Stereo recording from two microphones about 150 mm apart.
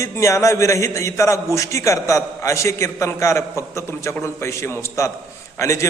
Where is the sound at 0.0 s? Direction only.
20° left (ahead or behind).